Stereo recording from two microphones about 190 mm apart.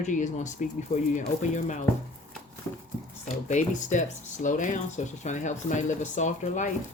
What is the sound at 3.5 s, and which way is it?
Speech, 40° left (ahead or behind).